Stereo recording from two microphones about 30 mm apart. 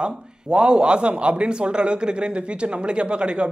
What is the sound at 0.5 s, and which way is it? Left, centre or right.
A man's voice, right.